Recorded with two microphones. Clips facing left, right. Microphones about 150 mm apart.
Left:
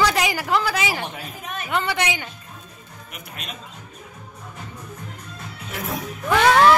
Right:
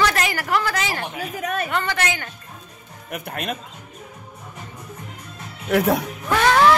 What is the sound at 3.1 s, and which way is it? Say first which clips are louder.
Speech: right 10 dB; 55° right (ahead or behind).